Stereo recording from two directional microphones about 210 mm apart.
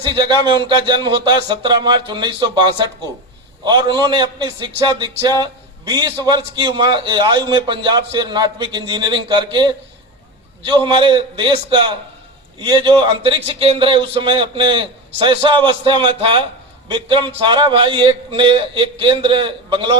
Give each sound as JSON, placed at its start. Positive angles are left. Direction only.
{"t": 0.0, "sound": "a man's voice", "side_deg": -20}